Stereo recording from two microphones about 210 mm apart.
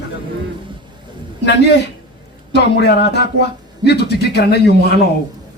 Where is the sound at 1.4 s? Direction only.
55° left (ahead or behind).